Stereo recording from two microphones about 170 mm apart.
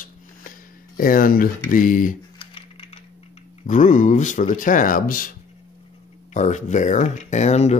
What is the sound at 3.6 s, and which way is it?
Speech, 50° left (ahead or behind).